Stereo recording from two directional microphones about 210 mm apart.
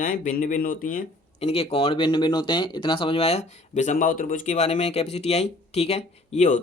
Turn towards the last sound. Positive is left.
turn(degrees=35)  # may be behind; listen again after turning